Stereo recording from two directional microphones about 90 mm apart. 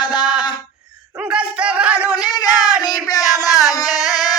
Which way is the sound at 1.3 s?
10° right (ahead or behind).